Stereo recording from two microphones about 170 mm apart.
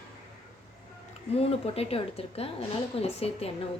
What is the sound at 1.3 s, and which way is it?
A woman's voice, 35° left (ahead or behind).